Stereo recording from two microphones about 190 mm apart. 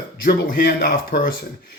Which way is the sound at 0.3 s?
50° left (ahead or behind).